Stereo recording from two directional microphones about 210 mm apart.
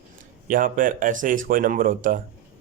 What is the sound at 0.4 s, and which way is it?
A man's voice, 40° right (ahead or behind).